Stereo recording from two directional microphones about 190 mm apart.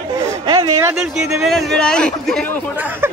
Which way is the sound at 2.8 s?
10° right (ahead or behind).